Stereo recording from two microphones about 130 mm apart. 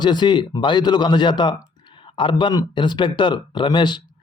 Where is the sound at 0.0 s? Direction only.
35° left (ahead or behind).